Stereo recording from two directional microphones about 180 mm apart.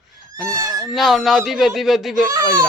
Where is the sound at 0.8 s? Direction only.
Centre (ahead or behind).